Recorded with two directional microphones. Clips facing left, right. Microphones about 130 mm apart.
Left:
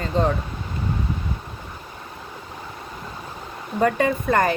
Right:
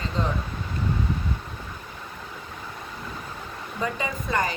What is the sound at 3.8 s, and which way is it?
Speech, 55° left (ahead or behind).